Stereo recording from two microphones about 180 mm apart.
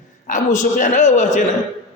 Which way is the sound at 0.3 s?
45° left (ahead or behind).